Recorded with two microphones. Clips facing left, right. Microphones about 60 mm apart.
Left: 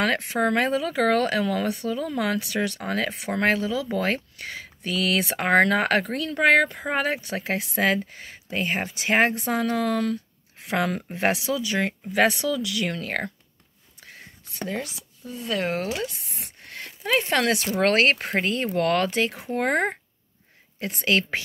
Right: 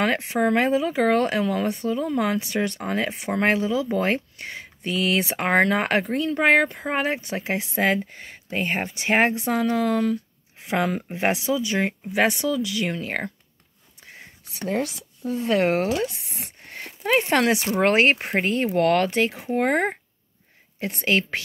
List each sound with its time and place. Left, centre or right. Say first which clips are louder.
0.0 s speech: right 1 dB; centre
15.2 s speech: right 6 dB; right
16.3 s a sound: right 3 dB; right
16.6 s speech: right 3 dB; right
19.0 s speech: right 2 dB; centre